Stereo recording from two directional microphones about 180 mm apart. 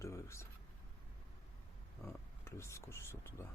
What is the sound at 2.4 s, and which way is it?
Speech, 15° left (ahead or behind).